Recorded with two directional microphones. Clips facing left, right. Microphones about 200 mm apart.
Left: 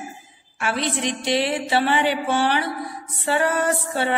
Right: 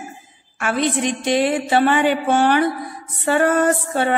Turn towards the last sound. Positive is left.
turn(degrees=-50)  # may be behind; listen again after turning